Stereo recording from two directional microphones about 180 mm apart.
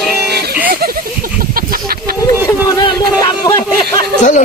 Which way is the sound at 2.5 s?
20° left (ahead or behind).